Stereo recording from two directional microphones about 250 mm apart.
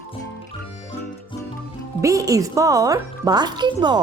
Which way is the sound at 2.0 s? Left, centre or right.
Centre.